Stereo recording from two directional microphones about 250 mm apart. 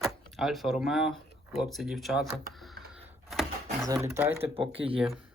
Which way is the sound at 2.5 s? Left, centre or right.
Centre.